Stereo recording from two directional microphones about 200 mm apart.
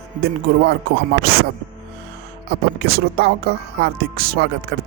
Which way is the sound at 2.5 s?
50° right (ahead or behind).